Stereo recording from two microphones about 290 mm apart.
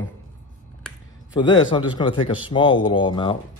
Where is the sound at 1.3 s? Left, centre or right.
Centre.